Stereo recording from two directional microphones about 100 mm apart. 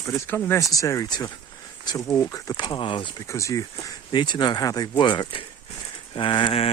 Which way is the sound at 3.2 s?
30° left (ahead or behind).